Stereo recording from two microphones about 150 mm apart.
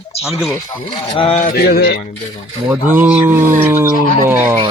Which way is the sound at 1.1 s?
40° left (ahead or behind).